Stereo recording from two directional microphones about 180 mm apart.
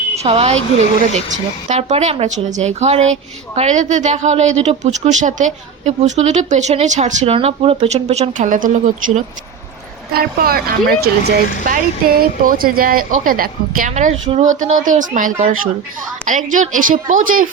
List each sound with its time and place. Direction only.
0.2 s a woman's voice: 35° right (ahead or behind)